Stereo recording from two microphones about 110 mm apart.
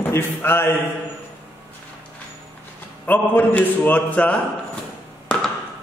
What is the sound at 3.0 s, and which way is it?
A man's voice, 15° left (ahead or behind).